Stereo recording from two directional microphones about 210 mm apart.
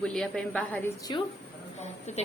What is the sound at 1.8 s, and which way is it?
Speech, 30° left (ahead or behind).